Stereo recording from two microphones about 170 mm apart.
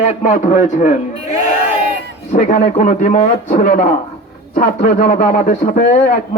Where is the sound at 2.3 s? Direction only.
50° left (ahead or behind).